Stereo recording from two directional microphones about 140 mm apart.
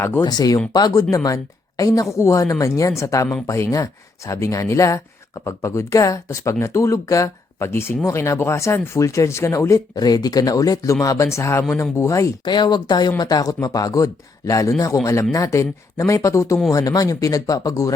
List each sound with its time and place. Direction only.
0.2 s speech: 30° left (ahead or behind)